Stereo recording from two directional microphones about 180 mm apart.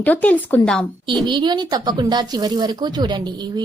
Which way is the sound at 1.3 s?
25° right (ahead or behind).